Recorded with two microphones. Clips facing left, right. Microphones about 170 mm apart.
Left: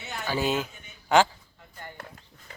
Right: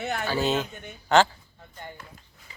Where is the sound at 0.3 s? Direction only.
10° left (ahead or behind).